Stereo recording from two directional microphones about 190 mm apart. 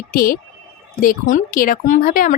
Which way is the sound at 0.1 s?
50° left (ahead or behind).